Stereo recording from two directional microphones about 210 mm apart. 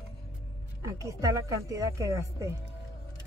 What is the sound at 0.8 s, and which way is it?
A woman's voice, 15° right (ahead or behind).